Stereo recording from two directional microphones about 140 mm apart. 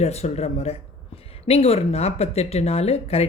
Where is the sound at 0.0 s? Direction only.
50° left (ahead or behind).